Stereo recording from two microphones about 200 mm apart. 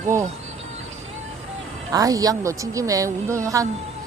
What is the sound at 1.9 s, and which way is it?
Speech, 15° right (ahead or behind).